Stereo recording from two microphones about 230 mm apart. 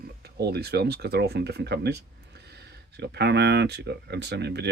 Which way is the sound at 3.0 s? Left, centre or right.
Right.